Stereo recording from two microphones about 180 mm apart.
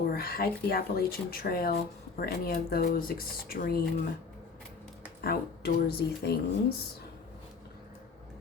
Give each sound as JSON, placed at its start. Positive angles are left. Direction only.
{"t": 0.1, "sound": "speech", "side_deg": 55}
{"t": 5.2, "sound": "speech", "side_deg": 60}